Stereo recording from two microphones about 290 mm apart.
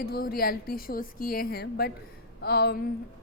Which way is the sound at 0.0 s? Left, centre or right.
Left.